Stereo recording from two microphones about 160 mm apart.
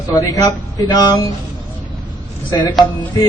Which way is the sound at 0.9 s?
25° left (ahead or behind).